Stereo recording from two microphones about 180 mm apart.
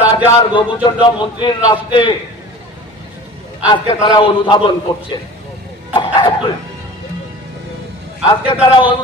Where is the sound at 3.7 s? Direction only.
30° left (ahead or behind).